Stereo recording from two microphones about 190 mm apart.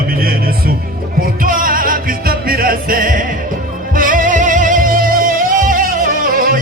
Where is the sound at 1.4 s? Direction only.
45° right (ahead or behind).